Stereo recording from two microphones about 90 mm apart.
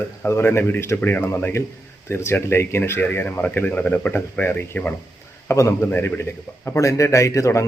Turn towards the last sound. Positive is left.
turn(degrees=35)  # may be behind; listen again after turning